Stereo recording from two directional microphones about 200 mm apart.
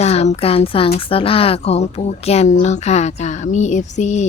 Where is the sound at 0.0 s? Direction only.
30° left (ahead or behind).